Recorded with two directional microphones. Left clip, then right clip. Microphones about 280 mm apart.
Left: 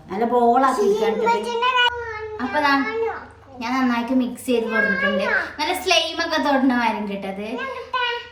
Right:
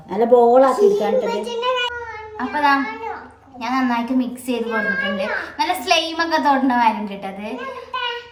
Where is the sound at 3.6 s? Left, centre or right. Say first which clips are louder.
Right 2 dB; centre.